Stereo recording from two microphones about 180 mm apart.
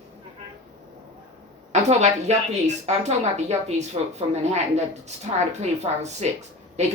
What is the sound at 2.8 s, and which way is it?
A woman's voice, 35° right (ahead or behind).